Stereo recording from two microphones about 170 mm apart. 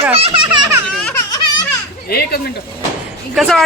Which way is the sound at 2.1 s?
65° left (ahead or behind).